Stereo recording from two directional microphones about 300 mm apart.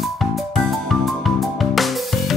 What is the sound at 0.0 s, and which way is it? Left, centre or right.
Music, centre.